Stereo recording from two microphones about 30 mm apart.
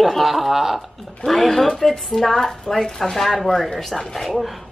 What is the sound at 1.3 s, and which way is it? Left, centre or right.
Speech, centre.